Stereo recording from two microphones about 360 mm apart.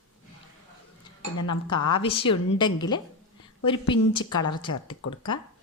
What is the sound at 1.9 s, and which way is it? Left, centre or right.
Speech, centre.